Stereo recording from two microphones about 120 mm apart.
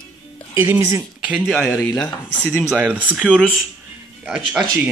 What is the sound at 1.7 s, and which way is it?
Speech, 25° left (ahead or behind).